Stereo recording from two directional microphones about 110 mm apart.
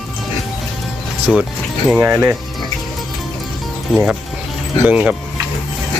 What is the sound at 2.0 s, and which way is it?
Speech, 15° right (ahead or behind).